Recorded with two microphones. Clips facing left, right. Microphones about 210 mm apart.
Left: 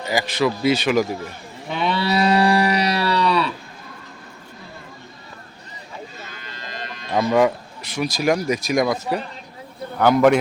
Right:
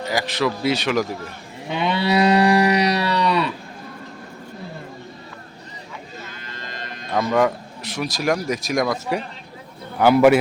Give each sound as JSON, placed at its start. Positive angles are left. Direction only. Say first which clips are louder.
{"t": 0.1, "sound": "speech", "louder": "left 2 dB", "side_deg": 0}
{"t": 1.7, "sound": "livestock", "louder": "right 1 dB", "side_deg": -20}
{"t": 6.5, "sound": "sheep", "louder": "left 2 dB", "side_deg": -50}
{"t": 7.1, "sound": "speech", "louder": "left 2 dB", "side_deg": 5}
{"t": 10.0, "sound": "a man's voice", "louder": "right 1 dB", "side_deg": -10}